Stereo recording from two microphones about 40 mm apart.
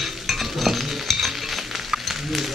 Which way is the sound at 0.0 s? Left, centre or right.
Centre.